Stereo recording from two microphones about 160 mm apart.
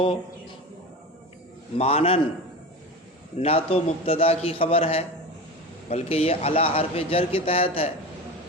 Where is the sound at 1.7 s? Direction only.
40° left (ahead or behind).